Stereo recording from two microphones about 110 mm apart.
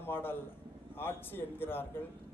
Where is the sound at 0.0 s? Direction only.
20° left (ahead or behind).